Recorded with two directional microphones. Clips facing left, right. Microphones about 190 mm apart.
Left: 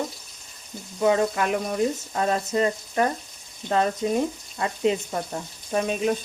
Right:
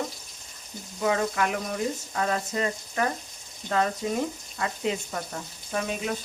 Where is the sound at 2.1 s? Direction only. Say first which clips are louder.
Left 4 dB; 25° left (ahead or behind).